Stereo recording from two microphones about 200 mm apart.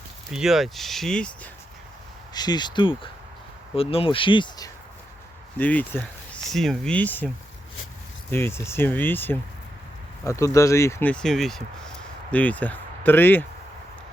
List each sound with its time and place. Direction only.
0.3 s speech: 5° right (ahead or behind)
2.3 s speech: 20° left (ahead or behind)
5.5 s speech: 10° left (ahead or behind)
8.3 s speech: 10° left (ahead or behind)